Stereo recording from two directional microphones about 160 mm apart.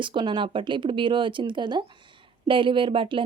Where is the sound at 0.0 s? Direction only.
30° right (ahead or behind).